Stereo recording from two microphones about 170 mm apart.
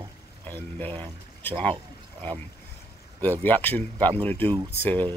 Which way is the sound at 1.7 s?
30° right (ahead or behind).